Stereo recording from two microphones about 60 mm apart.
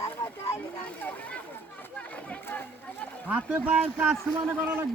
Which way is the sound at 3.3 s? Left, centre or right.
Right.